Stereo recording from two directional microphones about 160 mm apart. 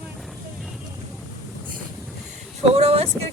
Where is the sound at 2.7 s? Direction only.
40° right (ahead or behind).